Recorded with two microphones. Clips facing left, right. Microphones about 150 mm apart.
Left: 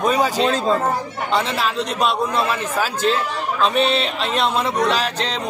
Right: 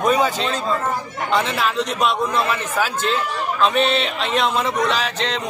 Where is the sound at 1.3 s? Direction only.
Centre (ahead or behind).